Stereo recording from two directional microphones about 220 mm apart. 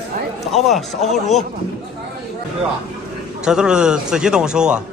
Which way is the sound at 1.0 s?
30° left (ahead or behind).